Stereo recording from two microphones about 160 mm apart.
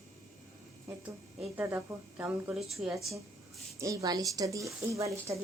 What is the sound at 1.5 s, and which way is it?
A woman's voice, 15° right (ahead or behind).